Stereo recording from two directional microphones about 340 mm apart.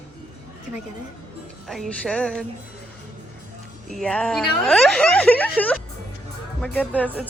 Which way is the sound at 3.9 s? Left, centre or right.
Centre.